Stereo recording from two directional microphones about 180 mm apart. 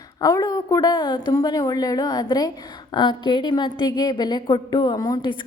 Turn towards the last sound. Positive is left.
turn(degrees=25)  # may be behind; listen again after turning